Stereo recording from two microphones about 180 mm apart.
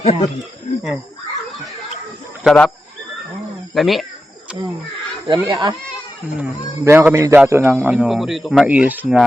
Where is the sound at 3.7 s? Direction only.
Centre (ahead or behind).